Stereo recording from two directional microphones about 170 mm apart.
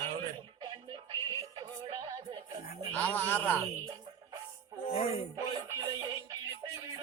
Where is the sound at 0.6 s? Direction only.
25° right (ahead or behind).